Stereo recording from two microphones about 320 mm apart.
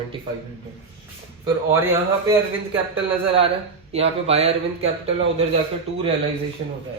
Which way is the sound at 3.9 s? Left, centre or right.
Centre.